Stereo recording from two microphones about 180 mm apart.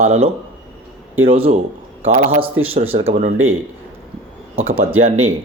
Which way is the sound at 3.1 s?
40° right (ahead or behind).